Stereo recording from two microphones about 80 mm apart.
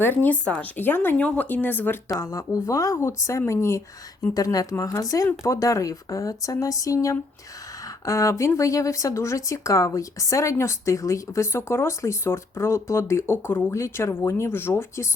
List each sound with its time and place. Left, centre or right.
0.0 s speech: left
2.1 s speech: left
4.4 s speech: left